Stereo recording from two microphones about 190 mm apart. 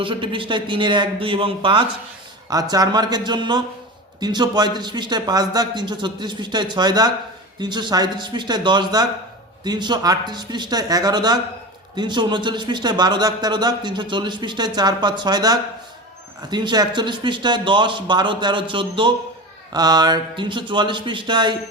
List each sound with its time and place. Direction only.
0.0 s a man's voice: 25° right (ahead or behind)